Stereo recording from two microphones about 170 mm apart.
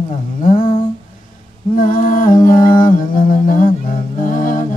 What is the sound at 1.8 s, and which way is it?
Music, 55° left (ahead or behind).